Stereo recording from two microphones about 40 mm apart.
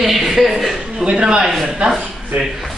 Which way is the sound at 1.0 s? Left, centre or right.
Right.